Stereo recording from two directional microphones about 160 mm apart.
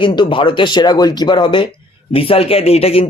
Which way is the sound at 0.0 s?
30° left (ahead or behind).